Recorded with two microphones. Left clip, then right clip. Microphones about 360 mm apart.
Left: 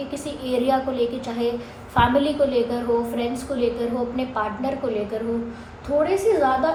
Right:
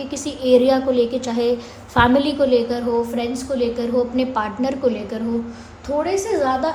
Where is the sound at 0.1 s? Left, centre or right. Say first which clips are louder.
Right 13 dB; right.